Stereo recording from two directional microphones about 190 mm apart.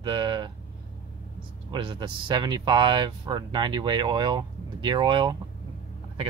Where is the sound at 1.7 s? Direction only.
25° right (ahead or behind).